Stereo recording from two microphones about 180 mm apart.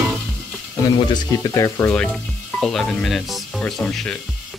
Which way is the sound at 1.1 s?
15° left (ahead or behind).